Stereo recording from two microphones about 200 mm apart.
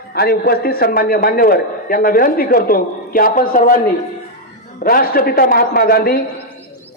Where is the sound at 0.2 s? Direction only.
50° left (ahead or behind).